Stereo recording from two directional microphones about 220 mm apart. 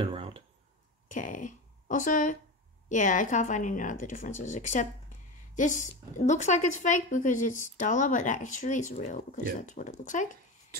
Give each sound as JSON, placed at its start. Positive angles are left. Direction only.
{"t": 0.0, "sound": "speech", "side_deg": -25}
{"t": 1.1, "sound": "speech", "side_deg": 35}